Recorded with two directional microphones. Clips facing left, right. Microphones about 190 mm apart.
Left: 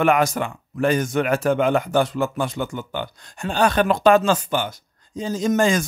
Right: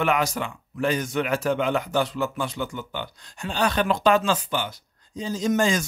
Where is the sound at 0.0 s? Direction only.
50° left (ahead or behind).